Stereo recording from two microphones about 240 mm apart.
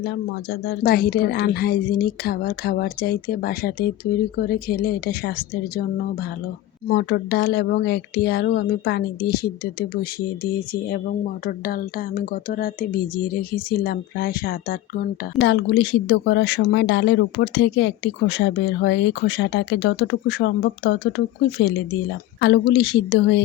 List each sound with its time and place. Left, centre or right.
0.6 s a woman's voice: left
6.8 s a woman's voice: left
22.4 s speech: left